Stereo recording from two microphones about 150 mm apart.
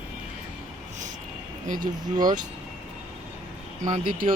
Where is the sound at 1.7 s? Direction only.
65° right (ahead or behind).